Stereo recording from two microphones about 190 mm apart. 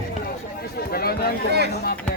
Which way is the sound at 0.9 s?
55° left (ahead or behind).